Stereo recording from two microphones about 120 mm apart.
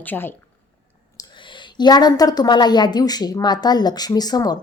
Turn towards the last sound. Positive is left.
turn(degrees=35)  # may be behind; listen again after turning